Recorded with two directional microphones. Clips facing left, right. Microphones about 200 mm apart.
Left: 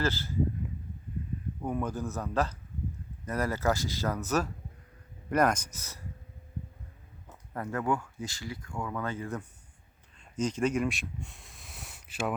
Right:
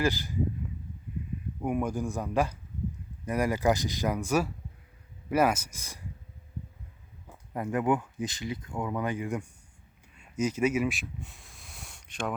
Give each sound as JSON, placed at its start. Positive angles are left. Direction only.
{"t": 0.0, "sound": "speech", "side_deg": -15}
{"t": 1.6, "sound": "speech", "side_deg": -15}
{"t": 7.3, "sound": "speech", "side_deg": -10}